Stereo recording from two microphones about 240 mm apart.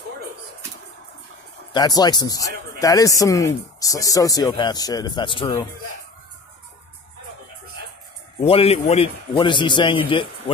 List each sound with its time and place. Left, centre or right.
1.7 s speech: centre
8.5 s a man's voice: left